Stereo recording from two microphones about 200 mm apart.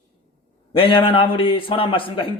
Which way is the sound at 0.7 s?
25° left (ahead or behind).